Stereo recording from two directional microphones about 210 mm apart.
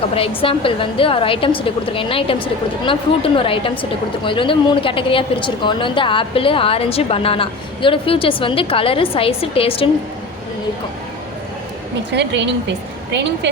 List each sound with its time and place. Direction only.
0.1 s speech: 25° left (ahead or behind)
12.1 s a woman's voice: 55° right (ahead or behind)